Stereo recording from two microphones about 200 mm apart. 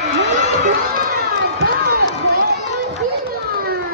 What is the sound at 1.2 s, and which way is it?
Run, 50° right (ahead or behind).